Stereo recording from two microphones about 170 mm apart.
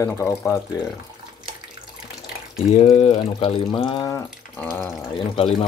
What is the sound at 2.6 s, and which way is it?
Speech, 40° left (ahead or behind).